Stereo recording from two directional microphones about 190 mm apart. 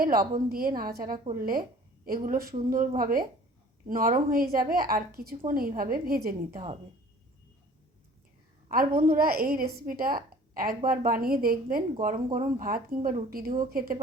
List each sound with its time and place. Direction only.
0.0 s a woman's voice: 50° right (ahead or behind)
8.7 s a woman's voice: 50° right (ahead or behind)